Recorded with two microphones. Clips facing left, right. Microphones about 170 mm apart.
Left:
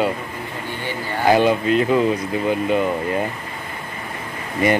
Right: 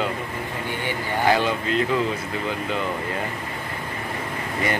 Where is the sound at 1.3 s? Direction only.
15° left (ahead or behind).